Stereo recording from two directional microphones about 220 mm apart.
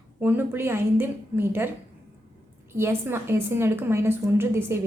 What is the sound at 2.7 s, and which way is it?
A woman's voice, 10° right (ahead or behind).